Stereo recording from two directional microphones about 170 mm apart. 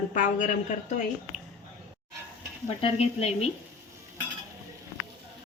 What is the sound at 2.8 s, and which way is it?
Speech, 35° left (ahead or behind).